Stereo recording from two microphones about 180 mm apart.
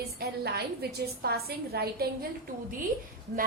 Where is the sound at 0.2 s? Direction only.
65° right (ahead or behind).